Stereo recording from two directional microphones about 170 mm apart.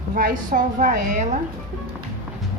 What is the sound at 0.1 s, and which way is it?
A woman's voice, 55° right (ahead or behind).